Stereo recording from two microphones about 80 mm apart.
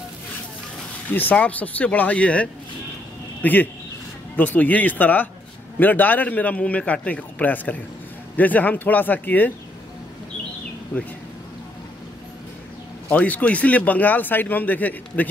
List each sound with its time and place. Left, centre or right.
1.1 s speech: centre
13.1 s speech: centre